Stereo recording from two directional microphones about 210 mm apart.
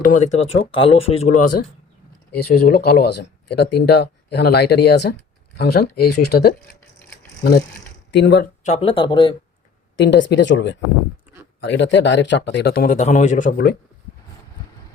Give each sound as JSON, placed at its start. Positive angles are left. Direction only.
{"t": 0.0, "sound": "speech", "side_deg": 35}
{"t": 2.3, "sound": "speech", "side_deg": 50}
{"t": 8.1, "sound": "speech", "side_deg": 55}
{"t": 8.6, "sound": "speech", "side_deg": 30}
{"t": 10.0, "sound": "speech", "side_deg": 60}